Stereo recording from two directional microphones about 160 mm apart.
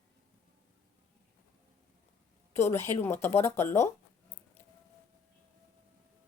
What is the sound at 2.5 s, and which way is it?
A woman's voice, 15° left (ahead or behind).